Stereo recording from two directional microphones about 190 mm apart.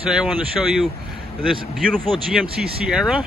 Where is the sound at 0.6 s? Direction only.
Centre (ahead or behind).